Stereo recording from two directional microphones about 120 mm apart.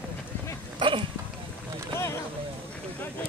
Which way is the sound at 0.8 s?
45° right (ahead or behind).